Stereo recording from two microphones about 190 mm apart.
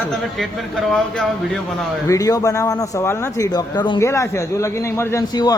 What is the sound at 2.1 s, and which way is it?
A man's voice, 15° left (ahead or behind).